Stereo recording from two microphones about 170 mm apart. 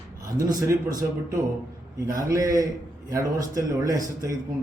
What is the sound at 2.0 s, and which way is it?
A man's voice, 20° right (ahead or behind).